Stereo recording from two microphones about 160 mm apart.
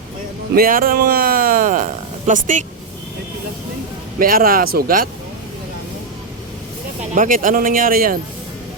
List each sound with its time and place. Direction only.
0.5 s speech: 65° right (ahead or behind)
4.2 s a man's voice: 65° right (ahead or behind)
7.1 s a man's voice: 55° right (ahead or behind)